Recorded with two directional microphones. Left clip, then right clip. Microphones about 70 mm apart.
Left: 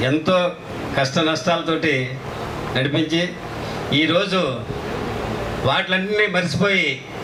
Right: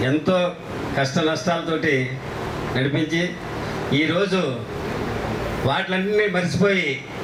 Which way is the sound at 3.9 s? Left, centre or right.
Left.